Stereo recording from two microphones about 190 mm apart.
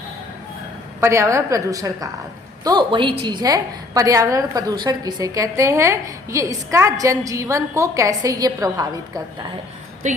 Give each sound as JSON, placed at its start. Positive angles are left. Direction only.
{"t": 1.0, "sound": "a woman's voice", "side_deg": -15}
{"t": 10.0, "sound": "a woman's voice", "side_deg": -40}